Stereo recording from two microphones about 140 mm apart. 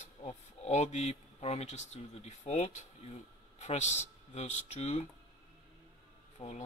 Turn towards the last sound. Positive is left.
turn(degrees=55)  # may be behind; listen again after turning